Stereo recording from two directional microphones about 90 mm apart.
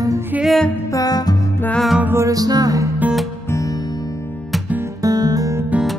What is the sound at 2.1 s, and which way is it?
Music, 40° right (ahead or behind).